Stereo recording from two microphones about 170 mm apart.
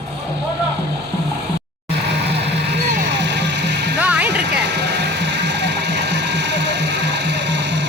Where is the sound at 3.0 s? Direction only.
90° right.